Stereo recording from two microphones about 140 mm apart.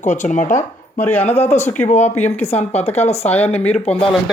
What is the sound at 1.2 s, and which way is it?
Speech, 50° left (ahead or behind).